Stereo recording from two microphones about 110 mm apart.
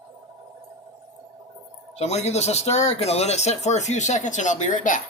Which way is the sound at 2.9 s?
70° left (ahead or behind).